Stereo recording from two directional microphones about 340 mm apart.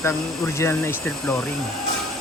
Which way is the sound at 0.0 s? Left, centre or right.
Centre.